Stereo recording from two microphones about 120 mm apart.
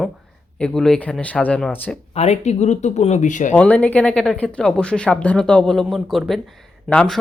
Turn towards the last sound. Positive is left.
turn(degrees=5)  # may be behind; listen again after turning